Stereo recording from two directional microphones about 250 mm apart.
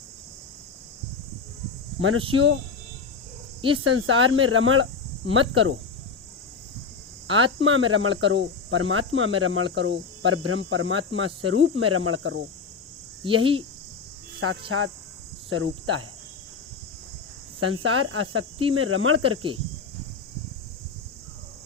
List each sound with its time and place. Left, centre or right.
2.0 s speech: right
3.6 s speech: right
3.8 s speech: right
7.3 s speech: right
13.2 s cricket: right
14.4 s speech: right
15.4 s cricket: right
17.6 s speech: right